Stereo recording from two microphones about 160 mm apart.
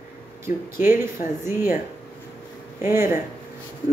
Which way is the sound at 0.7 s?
15° right (ahead or behind).